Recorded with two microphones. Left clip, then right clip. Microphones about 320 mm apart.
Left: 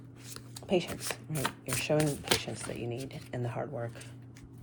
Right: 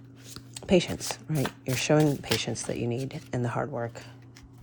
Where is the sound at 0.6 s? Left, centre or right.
Right.